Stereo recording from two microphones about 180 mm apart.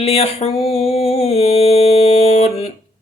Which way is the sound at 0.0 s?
35° left (ahead or behind).